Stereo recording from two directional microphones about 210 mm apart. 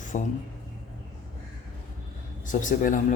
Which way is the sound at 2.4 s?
40° left (ahead or behind).